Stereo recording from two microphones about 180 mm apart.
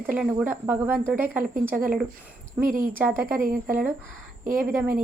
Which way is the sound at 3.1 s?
50° right (ahead or behind).